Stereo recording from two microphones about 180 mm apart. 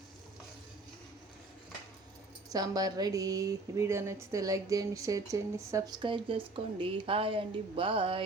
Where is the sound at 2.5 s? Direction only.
20° right (ahead or behind).